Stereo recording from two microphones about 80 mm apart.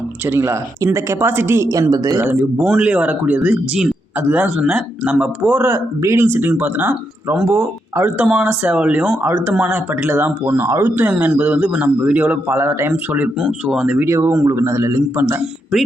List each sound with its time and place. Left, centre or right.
0.3 s a man's voice: right
1.9 s speech: right
2.6 s speech: centre
5.7 s speech: right
6.2 s a man's voice: right
8.2 s a man's voice: centre
10.6 s speech: right
10.8 s a man's voice: right
13.4 s speech: centre
14.0 s a man's voice: right
15.1 s a man's voice: right